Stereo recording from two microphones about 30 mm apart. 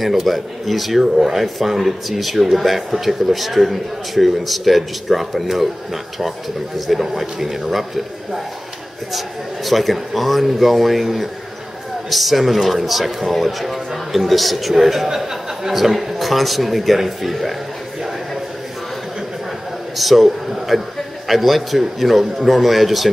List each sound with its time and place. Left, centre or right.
0.0 s speech: centre
6.9 s a man's voice: centre
9.7 s speech: centre
20.0 s speech: centre